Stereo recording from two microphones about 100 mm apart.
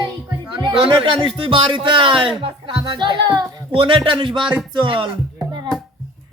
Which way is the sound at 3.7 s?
60° right (ahead or behind).